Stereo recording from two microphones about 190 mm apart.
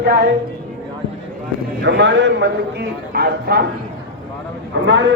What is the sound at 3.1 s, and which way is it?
Speech, 55° right (ahead or behind).